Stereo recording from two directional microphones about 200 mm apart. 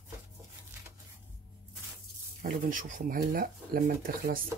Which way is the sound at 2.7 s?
40° right (ahead or behind).